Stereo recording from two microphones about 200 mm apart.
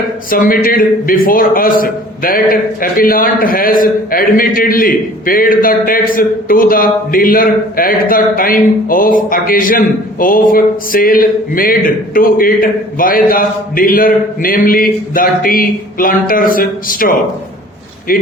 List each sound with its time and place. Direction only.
0.3 s a man's voice: 45° left (ahead or behind)